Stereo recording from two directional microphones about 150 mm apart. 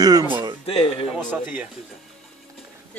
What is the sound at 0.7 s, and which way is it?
Speech, 40° left (ahead or behind).